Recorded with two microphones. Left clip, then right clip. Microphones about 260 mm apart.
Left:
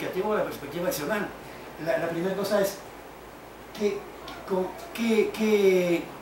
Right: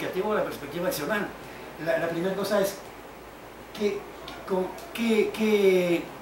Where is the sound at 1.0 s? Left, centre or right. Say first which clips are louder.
Right 1 dB; centre.